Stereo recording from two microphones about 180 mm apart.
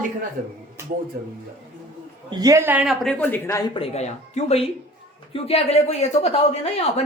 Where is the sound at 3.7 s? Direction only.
35° left (ahead or behind).